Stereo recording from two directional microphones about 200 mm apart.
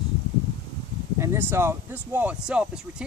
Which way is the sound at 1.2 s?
10° right (ahead or behind).